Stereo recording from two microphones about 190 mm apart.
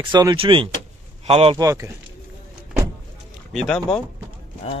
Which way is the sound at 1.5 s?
15° right (ahead or behind).